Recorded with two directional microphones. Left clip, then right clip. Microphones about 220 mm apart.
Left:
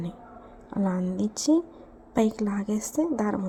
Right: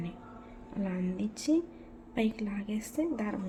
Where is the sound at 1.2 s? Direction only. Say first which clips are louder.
Left 6 dB; 25° left (ahead or behind).